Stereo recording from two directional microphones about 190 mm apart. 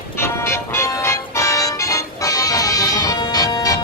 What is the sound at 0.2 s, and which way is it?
Music, 15° left (ahead or behind).